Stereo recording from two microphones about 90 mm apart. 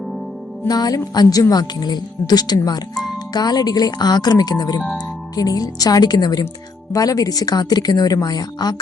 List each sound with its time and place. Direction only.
0.7 s a woman's voice: 45° left (ahead or behind)